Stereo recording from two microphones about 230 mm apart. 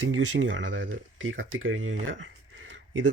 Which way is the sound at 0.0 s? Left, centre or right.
Right.